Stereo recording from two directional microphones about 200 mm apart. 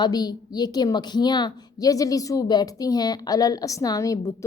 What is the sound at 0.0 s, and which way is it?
A woman's voice, 20° left (ahead or behind).